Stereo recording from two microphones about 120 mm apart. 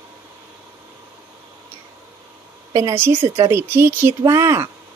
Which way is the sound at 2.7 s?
25° right (ahead or behind).